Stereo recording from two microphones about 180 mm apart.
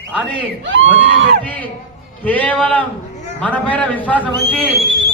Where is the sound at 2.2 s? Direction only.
10° left (ahead or behind).